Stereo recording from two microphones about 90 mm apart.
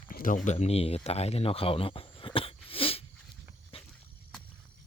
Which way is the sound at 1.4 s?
90° left.